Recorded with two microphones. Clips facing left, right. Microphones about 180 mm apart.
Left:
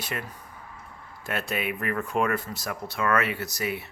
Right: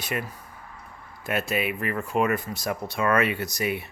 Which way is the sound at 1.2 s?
5° right (ahead or behind).